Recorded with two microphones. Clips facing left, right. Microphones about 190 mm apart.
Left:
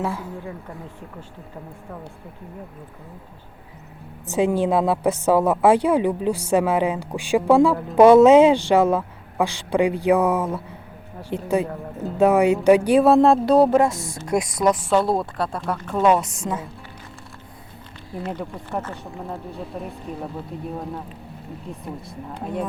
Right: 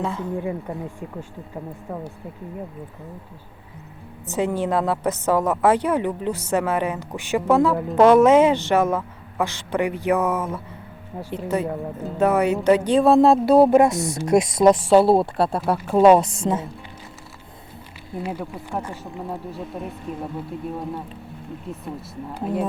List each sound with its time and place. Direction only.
0.0 s a woman's voice: 5° left (ahead or behind)
4.3 s a woman's voice: 15° left (ahead or behind); by 13.9 s 15° right (ahead or behind)
13.9 s speech: 70° right (ahead or behind)
14.3 s speech: 25° right (ahead or behind)
18.2 s speech: 10° right (ahead or behind)